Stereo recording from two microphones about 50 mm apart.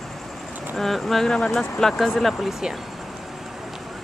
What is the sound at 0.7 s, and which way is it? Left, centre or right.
Speech, centre.